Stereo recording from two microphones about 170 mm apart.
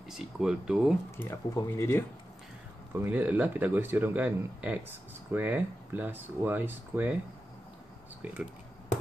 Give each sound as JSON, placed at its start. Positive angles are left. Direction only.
{"t": 0.1, "sound": "speech", "side_deg": -5}
{"t": 1.1, "sound": "speech", "side_deg": 15}
{"t": 3.0, "sound": "speech", "side_deg": -10}